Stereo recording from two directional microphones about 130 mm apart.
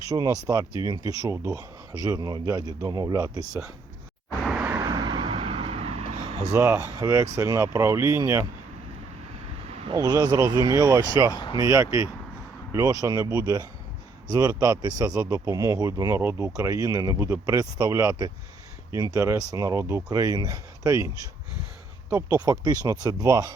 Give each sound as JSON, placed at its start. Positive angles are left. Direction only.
{"t": 0.1, "sound": "speech", "side_deg": -30}
{"t": 4.4, "sound": "vehicle", "side_deg": -5}
{"t": 4.8, "sound": "vehicle", "side_deg": -30}
{"t": 6.5, "sound": "speech", "side_deg": -25}
{"t": 9.9, "sound": "speech", "side_deg": -30}
{"t": 11.3, "sound": "speech", "side_deg": 35}
{"t": 11.7, "sound": "speech", "side_deg": -25}
{"t": 22.1, "sound": "speech", "side_deg": -30}